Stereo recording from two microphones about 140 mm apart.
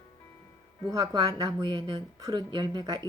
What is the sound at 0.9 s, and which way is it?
Speech, 25° right (ahead or behind).